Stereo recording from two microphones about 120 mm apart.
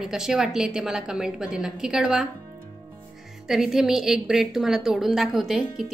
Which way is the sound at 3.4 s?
5° right (ahead or behind).